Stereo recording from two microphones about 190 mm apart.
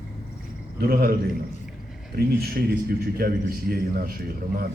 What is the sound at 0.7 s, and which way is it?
Speech, 50° right (ahead or behind).